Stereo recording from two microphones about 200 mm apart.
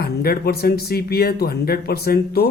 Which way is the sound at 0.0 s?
50° left (ahead or behind).